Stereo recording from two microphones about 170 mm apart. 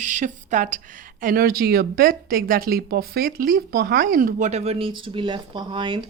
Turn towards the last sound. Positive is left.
turn(degrees=-30)  # may be behind; listen again after turning